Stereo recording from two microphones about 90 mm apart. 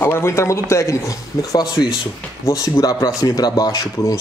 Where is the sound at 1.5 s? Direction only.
55° left (ahead or behind).